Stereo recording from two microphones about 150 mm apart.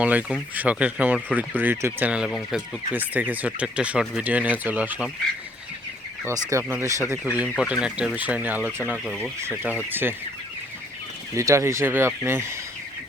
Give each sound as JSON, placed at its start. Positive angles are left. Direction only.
{"t": 0.0, "sound": "speech", "side_deg": -10}
{"t": 6.2, "sound": "speech", "side_deg": -20}
{"t": 11.3, "sound": "speech", "side_deg": -20}